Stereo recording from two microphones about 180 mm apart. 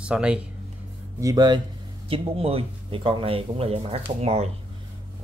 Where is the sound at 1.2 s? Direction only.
20° right (ahead or behind); by 4.5 s 40° right (ahead or behind).